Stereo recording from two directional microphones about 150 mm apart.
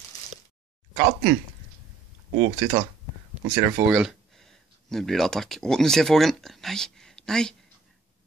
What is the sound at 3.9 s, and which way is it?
Speech, 5° right (ahead or behind).